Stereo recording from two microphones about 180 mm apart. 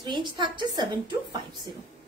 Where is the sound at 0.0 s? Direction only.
25° right (ahead or behind).